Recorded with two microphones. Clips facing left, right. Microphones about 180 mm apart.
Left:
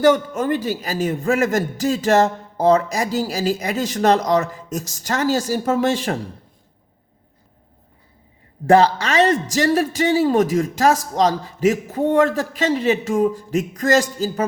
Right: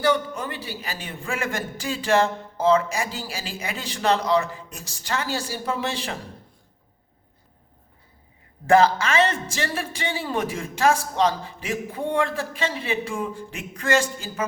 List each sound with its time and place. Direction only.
0.0 s a man's voice: 45° left (ahead or behind)
8.6 s a man's voice: 35° left (ahead or behind)